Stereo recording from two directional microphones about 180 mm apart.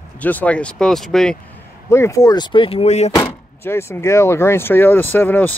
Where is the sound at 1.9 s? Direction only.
15° left (ahead or behind); by 3.1 s 35° left (ahead or behind).